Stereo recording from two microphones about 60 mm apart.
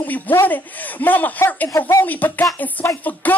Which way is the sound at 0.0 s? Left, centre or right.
Left.